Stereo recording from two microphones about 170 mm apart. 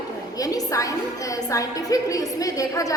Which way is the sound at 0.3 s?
20° left (ahead or behind).